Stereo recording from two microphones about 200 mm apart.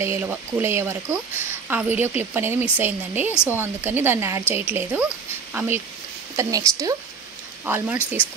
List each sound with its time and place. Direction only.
0.0 s speech: 10° right (ahead or behind)